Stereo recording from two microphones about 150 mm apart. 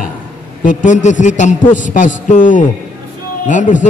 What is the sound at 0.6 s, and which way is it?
A man's voice, 60° left (ahead or behind).